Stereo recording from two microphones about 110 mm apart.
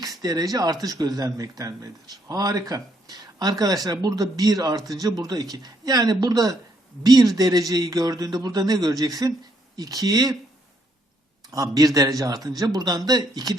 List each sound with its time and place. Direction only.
0.2 s speech: 35° right (ahead or behind)
11.5 s speech: 30° right (ahead or behind)